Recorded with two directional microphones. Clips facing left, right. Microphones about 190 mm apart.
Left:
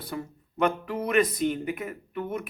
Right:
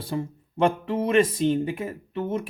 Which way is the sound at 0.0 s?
25° right (ahead or behind).